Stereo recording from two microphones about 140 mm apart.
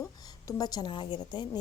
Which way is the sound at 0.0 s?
25° left (ahead or behind).